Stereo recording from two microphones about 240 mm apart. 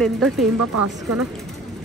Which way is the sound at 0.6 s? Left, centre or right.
Right.